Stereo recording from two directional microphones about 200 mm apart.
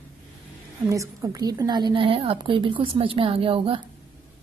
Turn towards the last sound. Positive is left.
turn(degrees=-25)  # may be behind; listen again after turning